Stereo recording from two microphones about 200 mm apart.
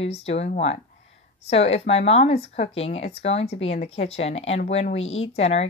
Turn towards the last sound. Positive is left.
turn(degrees=30)  # may be behind; listen again after turning